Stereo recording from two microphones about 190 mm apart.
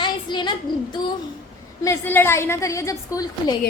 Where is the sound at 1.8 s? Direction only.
10° left (ahead or behind).